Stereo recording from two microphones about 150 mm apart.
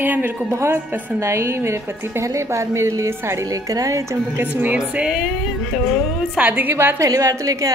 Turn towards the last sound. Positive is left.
turn(degrees=-20)  # may be behind; listen again after turning